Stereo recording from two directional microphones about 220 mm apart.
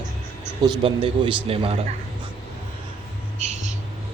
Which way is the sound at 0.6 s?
25° right (ahead or behind).